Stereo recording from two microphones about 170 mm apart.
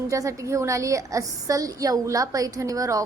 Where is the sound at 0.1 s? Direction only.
20° right (ahead or behind).